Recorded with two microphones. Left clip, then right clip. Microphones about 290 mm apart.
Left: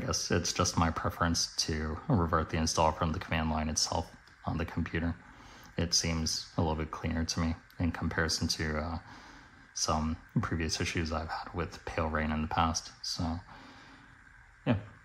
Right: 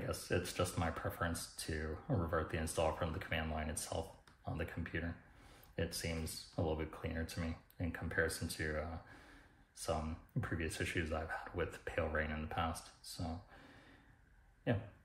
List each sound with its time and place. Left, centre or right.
0.1 s speech: centre
10.4 s speech: centre